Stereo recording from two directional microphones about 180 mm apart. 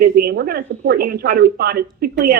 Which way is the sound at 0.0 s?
60° right (ahead or behind).